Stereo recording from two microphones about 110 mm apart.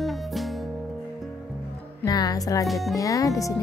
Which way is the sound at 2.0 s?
35° left (ahead or behind).